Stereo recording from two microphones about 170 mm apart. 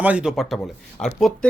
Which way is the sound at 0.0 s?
5° right (ahead or behind).